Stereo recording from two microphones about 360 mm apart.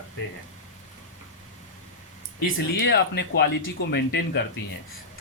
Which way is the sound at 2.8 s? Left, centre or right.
Left.